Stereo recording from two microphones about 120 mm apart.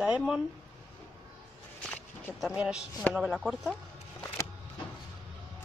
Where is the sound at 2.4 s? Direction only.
10° right (ahead or behind).